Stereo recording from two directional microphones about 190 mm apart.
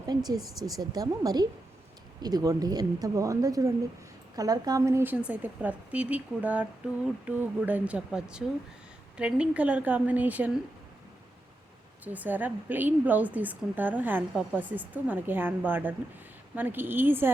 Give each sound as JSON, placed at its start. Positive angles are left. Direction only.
{"t": 0.1, "sound": "speech", "side_deg": -20}
{"t": 12.0, "sound": "speech", "side_deg": -10}